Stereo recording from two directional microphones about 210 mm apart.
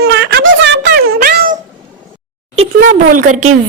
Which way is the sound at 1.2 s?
45° right (ahead or behind).